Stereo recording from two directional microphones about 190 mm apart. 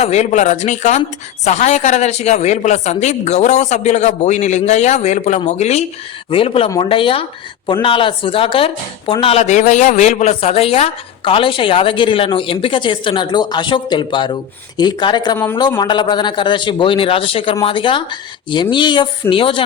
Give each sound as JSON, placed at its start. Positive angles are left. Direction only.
{"t": 0.0, "sound": "speech", "side_deg": 35}